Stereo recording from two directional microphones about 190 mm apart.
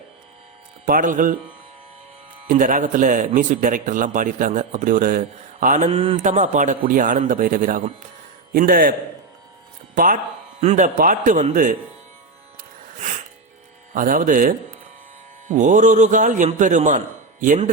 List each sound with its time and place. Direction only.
0.9 s a man's voice: 45° right (ahead or behind)
2.5 s a man's voice: 45° right (ahead or behind)
13.0 s music: 40° right (ahead or behind)
13.9 s a man's voice: 45° right (ahead or behind)